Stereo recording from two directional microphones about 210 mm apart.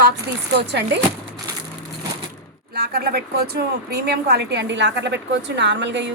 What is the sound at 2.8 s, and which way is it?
A woman's voice, 45° right (ahead or behind).